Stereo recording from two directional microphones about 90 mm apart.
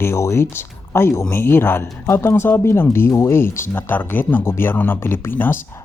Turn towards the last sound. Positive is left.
turn(degrees=25)  # may be behind; listen again after turning